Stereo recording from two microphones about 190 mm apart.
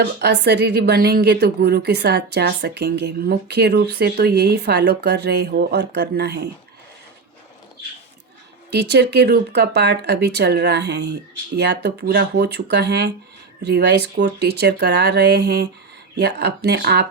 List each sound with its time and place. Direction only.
0.0 s speech: 60° right (ahead or behind)
8.7 s speech: 60° right (ahead or behind)